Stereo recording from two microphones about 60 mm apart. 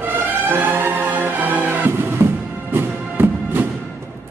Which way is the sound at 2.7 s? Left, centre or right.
Right.